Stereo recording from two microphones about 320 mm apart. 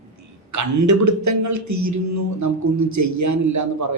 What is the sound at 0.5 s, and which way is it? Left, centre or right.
A man's voice, right.